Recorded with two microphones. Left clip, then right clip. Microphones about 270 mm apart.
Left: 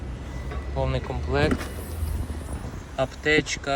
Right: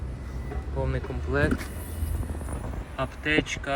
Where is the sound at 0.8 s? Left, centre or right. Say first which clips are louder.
Left 4 dB; centre.